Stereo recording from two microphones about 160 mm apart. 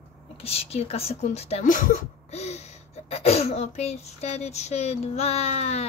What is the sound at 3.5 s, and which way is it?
A woman's voice, 45° left (ahead or behind).